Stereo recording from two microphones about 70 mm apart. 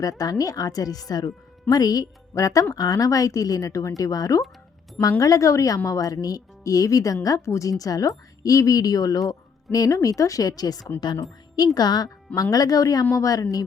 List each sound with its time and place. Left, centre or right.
0.0 s speech: left
2.7 s a woman's voice: left
12.3 s speech: left